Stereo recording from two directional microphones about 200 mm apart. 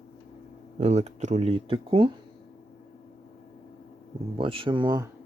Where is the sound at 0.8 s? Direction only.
30° right (ahead or behind).